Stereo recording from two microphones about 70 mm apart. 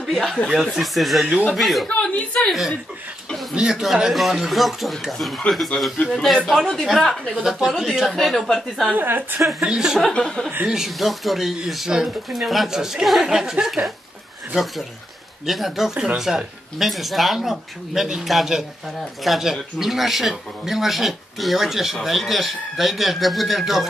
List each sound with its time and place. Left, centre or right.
0.0 s snicker: centre
0.5 s speech: centre
5.7 s speech: centre
6.1 s speech: centre
7.4 s speech: centre
8.9 s a woman's voice: right
9.6 s speech: centre
10.1 s speech: centre
10.7 s speech: centre